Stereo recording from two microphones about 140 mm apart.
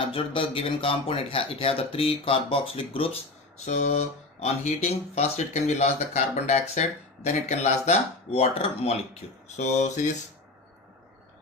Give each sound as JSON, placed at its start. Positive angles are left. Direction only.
{"t": 0.1, "sound": "speech", "side_deg": 40}
{"t": 3.7, "sound": "speech", "side_deg": 55}
{"t": 9.6, "sound": "speech", "side_deg": 60}